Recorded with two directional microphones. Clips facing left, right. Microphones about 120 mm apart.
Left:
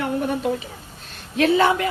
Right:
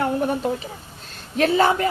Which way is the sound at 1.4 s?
40° right (ahead or behind).